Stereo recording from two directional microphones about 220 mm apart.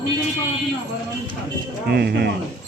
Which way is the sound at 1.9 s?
50° right (ahead or behind).